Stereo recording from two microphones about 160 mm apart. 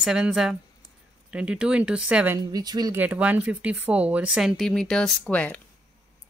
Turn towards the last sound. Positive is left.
turn(degrees=10)  # may be behind; listen again after turning